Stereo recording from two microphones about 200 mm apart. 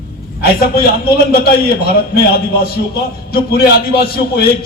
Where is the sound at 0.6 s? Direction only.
50° left (ahead or behind).